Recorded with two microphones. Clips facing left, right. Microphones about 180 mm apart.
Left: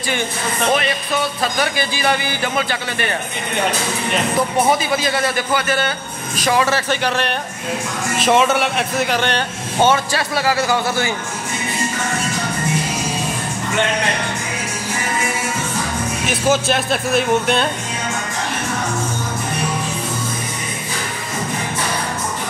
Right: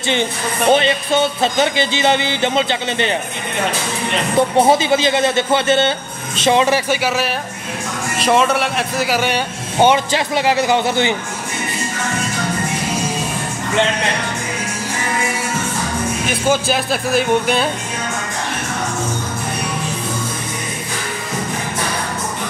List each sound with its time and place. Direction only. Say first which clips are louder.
0.7 s a man's voice: right 6 dB; 25° right (ahead or behind)
4.4 s a man's voice: right 6 dB; 25° right (ahead or behind)
16.3 s speech: left 1 dB; centre (ahead or behind)